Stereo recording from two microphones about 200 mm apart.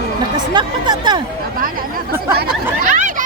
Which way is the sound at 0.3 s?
20° right (ahead or behind).